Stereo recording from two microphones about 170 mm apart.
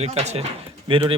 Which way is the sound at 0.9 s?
30° right (ahead or behind).